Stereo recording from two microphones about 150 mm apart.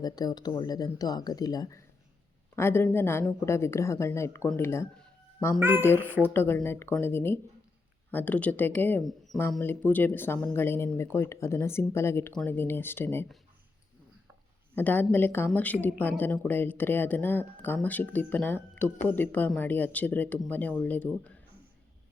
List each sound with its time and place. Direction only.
0.0 s speech: 25° left (ahead or behind)
5.5 s speech: 15° right (ahead or behind)
6.3 s speech: 15° left (ahead or behind)
14.8 s speech: 10° left (ahead or behind)